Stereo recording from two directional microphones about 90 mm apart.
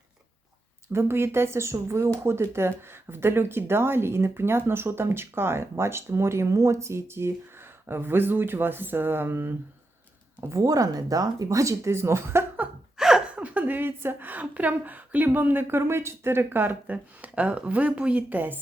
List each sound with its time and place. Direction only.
0.9 s speech: 25° right (ahead or behind)
10.5 s speech: 40° right (ahead or behind)
13.0 s speech: 5° right (ahead or behind)